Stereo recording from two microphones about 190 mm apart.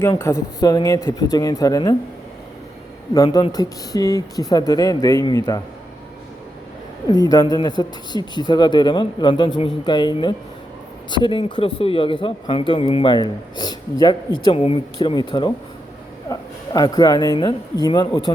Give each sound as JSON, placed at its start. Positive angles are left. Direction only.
{"t": 0.0, "sound": "a man's voice", "side_deg": 15}
{"t": 3.2, "sound": "speech", "side_deg": 20}
{"t": 7.1, "sound": "speech", "side_deg": 20}